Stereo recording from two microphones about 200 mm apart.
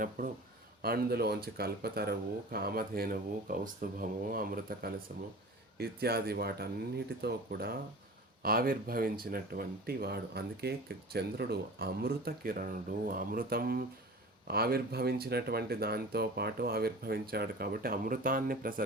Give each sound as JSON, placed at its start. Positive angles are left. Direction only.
{"t": 0.8, "sound": "speech", "side_deg": -50}